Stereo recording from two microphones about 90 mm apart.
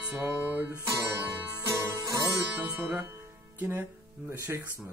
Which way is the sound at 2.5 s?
20° right (ahead or behind).